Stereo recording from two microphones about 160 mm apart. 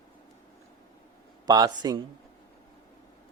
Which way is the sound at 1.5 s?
25° right (ahead or behind).